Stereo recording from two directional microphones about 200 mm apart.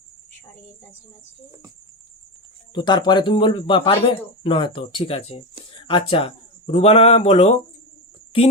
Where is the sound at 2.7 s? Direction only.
20° left (ahead or behind).